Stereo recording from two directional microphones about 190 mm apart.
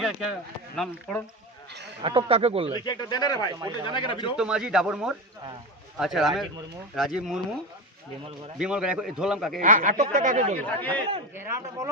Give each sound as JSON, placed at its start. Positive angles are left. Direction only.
{"t": 0.0, "sound": "a man's voice", "side_deg": -5}
{"t": 2.0, "sound": "speech", "side_deg": -25}
{"t": 2.7, "sound": "speech", "side_deg": 25}
{"t": 4.4, "sound": "a man's voice", "side_deg": -5}
{"t": 8.5, "sound": "a man's voice", "side_deg": -5}
{"t": 9.6, "sound": "speech", "side_deg": -45}
{"t": 10.6, "sound": "speech", "side_deg": 10}